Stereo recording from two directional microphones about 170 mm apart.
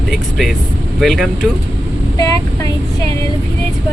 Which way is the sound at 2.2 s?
20° left (ahead or behind).